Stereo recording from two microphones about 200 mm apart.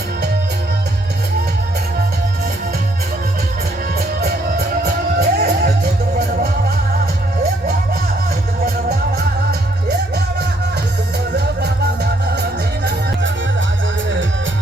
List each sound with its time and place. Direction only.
4.2 s music: 50° right (ahead or behind)
12.4 s music: 55° right (ahead or behind)